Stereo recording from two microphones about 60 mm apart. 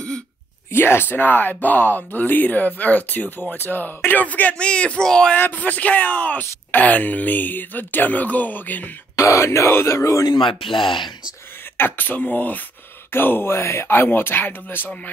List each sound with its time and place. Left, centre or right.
0.7 s speech: left; by 5.3 s centre
5.4 s speech: left
9.1 s speech: left
11.7 s speech: left